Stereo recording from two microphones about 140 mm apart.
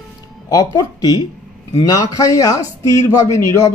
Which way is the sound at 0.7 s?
25° left (ahead or behind).